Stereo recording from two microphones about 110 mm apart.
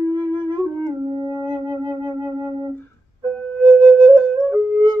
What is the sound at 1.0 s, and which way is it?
Music, 45° right (ahead or behind).